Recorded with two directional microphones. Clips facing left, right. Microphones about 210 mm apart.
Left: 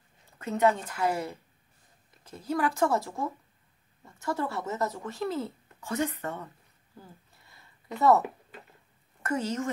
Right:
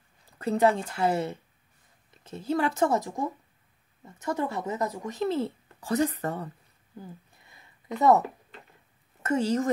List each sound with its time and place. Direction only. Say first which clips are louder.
0.4 s speech: right 2 dB; 30° right (ahead or behind)
7.0 s a sound: right 7 dB; 15° right (ahead or behind)
9.2 s speech: right 5 dB; 30° right (ahead or behind)